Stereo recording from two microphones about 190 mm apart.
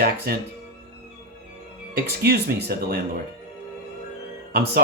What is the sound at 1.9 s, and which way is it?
Speech, 55° right (ahead or behind).